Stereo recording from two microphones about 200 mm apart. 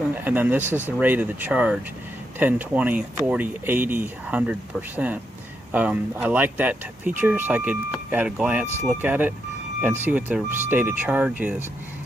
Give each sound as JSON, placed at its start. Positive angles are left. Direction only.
{"t": 0.1, "sound": "speech", "side_deg": -10}